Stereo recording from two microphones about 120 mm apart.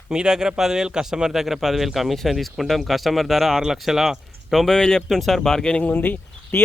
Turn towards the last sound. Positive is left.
turn(degrees=15)  # may be behind; listen again after turning